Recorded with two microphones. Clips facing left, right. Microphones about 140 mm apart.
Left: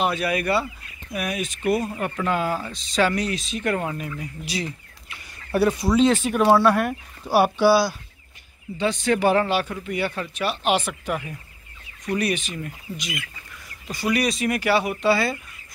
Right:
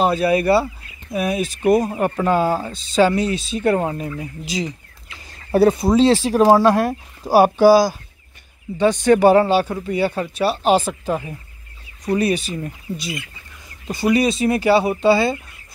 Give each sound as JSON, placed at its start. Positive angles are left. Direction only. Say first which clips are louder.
{"t": 0.0, "sound": "speech", "louder": "right 7 dB", "side_deg": -30}
{"t": 1.6, "sound": "speech", "louder": "right 7 dB", "side_deg": -40}
{"t": 5.5, "sound": "speech", "louder": "right 6 dB", "side_deg": -45}
{"t": 5.9, "sound": "speech", "louder": "right 3 dB", "side_deg": -35}